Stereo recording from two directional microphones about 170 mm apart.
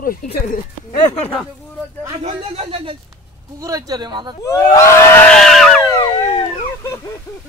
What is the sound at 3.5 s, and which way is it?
Speech, 20° right (ahead or behind).